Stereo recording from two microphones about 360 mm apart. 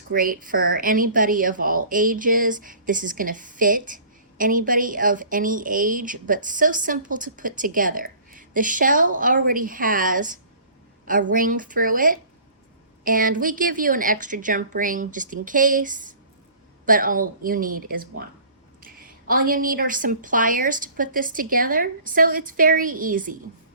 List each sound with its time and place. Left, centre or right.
0.1 s speech: right